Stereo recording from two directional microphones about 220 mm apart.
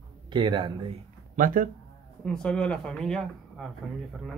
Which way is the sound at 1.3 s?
40° right (ahead or behind).